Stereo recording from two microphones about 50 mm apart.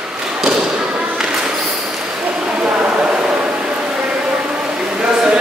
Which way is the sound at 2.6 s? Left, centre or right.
Right.